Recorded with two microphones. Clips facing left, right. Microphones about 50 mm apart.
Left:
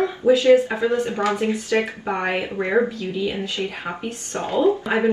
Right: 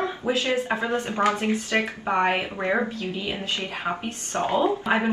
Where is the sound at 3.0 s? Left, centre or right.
Right.